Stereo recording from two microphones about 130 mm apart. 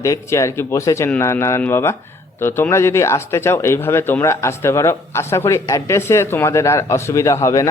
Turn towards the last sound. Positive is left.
turn(degrees=25)  # may be behind; listen again after turning